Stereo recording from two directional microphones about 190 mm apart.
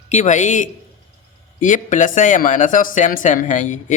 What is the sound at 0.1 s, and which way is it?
A man's voice, 40° left (ahead or behind).